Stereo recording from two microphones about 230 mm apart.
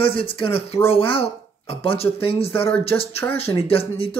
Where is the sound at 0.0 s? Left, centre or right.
Left.